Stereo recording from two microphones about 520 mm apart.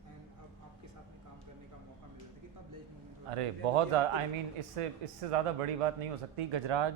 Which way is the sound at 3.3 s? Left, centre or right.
Right.